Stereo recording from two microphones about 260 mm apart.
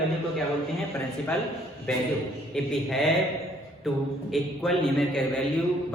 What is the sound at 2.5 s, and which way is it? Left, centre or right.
Speech, centre.